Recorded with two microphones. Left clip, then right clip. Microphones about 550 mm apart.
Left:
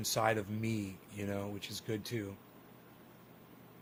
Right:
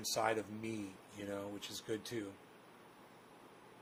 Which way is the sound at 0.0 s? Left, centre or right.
Left.